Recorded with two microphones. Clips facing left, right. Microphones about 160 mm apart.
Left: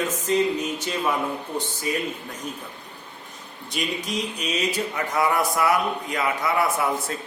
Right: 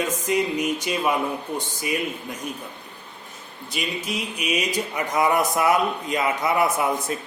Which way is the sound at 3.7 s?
5° right (ahead or behind).